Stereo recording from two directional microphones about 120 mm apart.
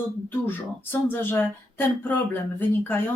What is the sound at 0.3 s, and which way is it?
Speech, 20° left (ahead or behind).